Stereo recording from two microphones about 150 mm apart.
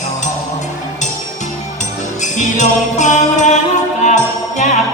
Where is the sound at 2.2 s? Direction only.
55° left (ahead or behind).